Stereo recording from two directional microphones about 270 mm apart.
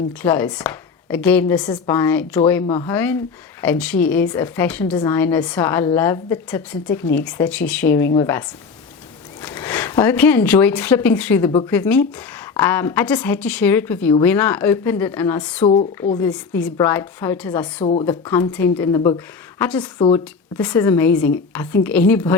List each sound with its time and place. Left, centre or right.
0.2 s a woman's voice: centre
15.6 s speech: left
16.3 s a woman's voice: centre
20.0 s speech: centre
20.6 s a woman's voice: centre